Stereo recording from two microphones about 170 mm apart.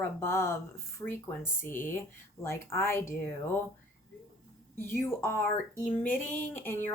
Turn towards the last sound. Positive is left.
turn(degrees=15)  # may be behind; listen again after turning